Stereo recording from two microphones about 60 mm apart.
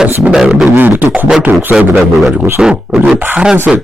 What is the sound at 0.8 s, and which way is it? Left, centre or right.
Speech, right.